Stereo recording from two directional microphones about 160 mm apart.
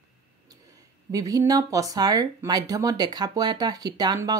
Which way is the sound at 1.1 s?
20° right (ahead or behind).